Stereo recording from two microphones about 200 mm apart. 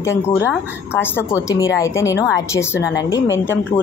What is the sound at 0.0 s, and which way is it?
Speech, 15° left (ahead or behind).